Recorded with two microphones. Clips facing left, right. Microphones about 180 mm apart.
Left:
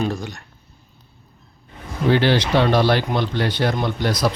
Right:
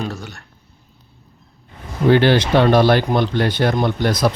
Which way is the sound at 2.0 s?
55° right (ahead or behind).